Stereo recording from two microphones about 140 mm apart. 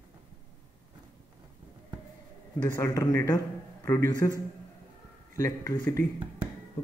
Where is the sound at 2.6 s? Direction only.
25° left (ahead or behind).